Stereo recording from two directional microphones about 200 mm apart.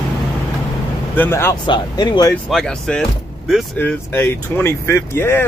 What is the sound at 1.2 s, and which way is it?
Speech, 10° left (ahead or behind).